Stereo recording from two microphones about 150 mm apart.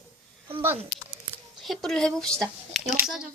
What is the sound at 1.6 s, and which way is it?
A woman's voice, centre (ahead or behind).